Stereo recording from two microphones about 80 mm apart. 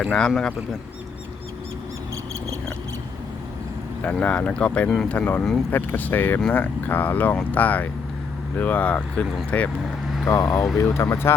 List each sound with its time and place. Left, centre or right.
0.0 s speech: centre
4.0 s speech: centre
10.2 s speech: left